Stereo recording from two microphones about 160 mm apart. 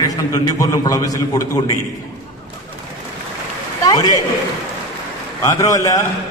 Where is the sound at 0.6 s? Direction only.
20° left (ahead or behind).